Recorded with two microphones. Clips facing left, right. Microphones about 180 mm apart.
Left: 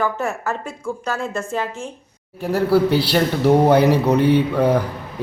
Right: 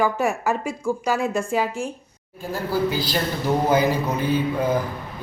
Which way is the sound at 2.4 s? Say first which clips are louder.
Left 7 dB; 70° left (ahead or behind).